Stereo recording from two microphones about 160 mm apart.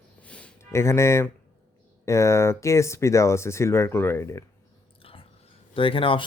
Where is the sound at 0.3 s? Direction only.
10° left (ahead or behind).